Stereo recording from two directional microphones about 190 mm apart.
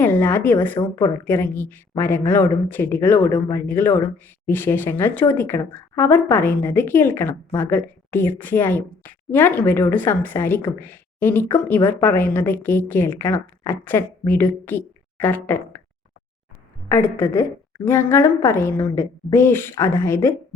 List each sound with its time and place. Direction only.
0.0 s speech: 10° left (ahead or behind)
16.9 s speech: 15° left (ahead or behind)